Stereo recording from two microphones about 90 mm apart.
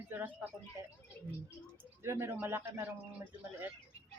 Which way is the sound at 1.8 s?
25° right (ahead or behind).